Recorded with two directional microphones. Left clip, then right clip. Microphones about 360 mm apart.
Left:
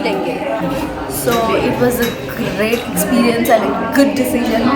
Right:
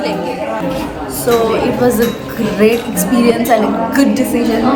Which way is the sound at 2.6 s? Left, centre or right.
Centre.